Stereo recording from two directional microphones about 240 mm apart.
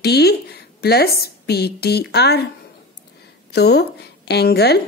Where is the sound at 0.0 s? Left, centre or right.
Left.